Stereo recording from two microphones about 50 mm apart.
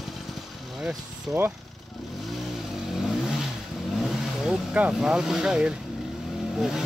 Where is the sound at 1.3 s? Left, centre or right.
Centre.